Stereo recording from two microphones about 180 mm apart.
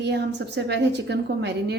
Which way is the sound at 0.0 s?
70° right (ahead or behind).